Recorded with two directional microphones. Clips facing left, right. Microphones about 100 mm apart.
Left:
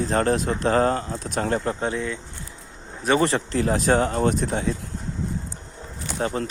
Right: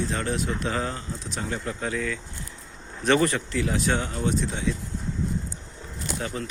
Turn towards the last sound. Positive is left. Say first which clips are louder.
# left 6 dB
turn(degrees=35)  # may be behind; listen again after turning